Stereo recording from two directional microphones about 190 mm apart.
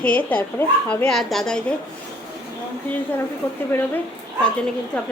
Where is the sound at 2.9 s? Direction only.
10° left (ahead or behind).